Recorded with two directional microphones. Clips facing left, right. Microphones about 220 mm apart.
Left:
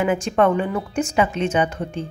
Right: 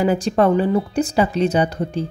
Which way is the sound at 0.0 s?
35° right (ahead or behind).